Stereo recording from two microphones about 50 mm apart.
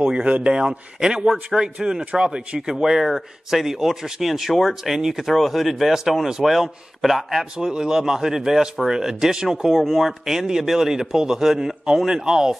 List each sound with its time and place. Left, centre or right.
0.0 s a man's voice: right